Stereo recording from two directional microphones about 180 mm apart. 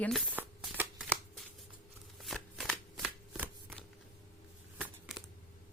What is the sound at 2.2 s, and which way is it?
Shuffling cards, centre (ahead or behind).